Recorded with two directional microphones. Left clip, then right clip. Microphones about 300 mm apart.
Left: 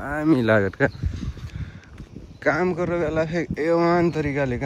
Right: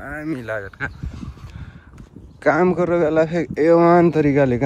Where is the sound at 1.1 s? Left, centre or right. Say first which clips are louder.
Left 1 dB; centre.